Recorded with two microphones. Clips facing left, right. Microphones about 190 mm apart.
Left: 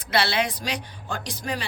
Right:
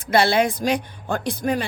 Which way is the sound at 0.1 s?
50° right (ahead or behind).